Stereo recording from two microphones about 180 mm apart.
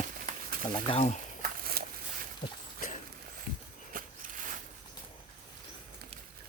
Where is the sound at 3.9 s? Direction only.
45° right (ahead or behind).